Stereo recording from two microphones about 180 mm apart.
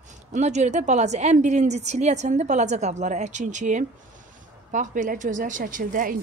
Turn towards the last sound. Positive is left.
turn(degrees=-50)  # may be behind; listen again after turning